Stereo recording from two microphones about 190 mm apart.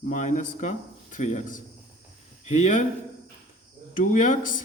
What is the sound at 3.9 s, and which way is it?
Speech, 45° left (ahead or behind).